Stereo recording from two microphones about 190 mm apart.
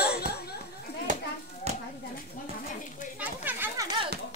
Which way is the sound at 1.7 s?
35° right (ahead or behind).